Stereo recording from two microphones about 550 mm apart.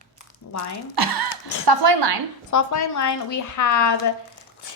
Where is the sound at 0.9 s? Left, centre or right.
Right.